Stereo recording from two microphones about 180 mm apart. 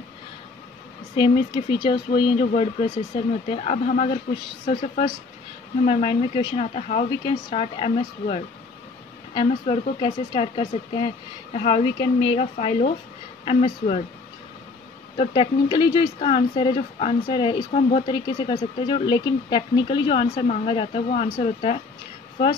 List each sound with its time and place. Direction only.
1.1 s speech: 25° left (ahead or behind)
5.9 s speech: 30° left (ahead or behind)
15.1 s speech: 25° left (ahead or behind)